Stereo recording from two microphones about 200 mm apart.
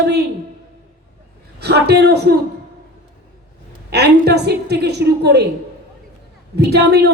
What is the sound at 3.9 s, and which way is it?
A woman's voice, 55° right (ahead or behind).